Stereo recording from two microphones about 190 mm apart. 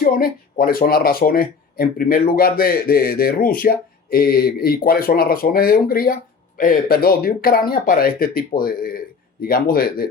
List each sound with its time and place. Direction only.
0.0 s speech: 50° left (ahead or behind)